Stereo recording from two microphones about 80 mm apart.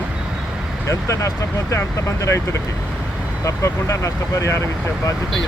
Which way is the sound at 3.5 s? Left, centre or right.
Left.